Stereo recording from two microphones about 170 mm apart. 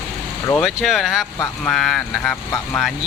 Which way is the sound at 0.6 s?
Centre (ahead or behind).